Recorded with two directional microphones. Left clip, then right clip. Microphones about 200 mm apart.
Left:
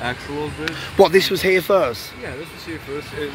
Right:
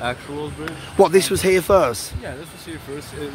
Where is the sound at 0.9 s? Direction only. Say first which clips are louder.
Left 1 dB; 15° right (ahead or behind).